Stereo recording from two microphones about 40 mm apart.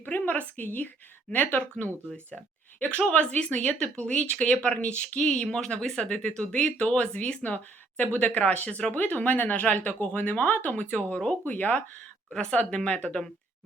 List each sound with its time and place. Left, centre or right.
0.0 s a woman's voice: left
2.7 s speech: left
3.1 s speech: left
12.5 s speech: left